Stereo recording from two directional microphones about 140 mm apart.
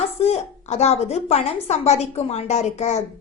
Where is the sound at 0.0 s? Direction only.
45° left (ahead or behind).